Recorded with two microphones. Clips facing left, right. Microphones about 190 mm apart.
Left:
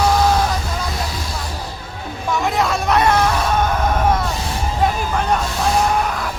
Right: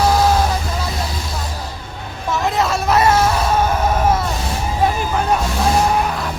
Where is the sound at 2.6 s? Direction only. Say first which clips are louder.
Right 2 dB; centre (ahead or behind).